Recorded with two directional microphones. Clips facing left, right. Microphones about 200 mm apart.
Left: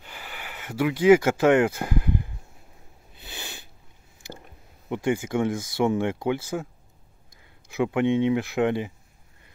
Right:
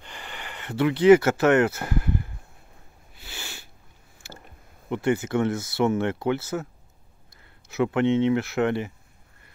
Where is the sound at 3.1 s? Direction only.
20° left (ahead or behind).